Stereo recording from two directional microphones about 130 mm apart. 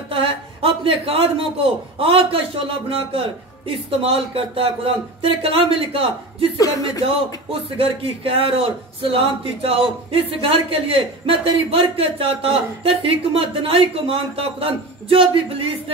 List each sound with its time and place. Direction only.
0.1 s a man's voice: 45° right (ahead or behind)
7.7 s a man's voice: 45° right (ahead or behind)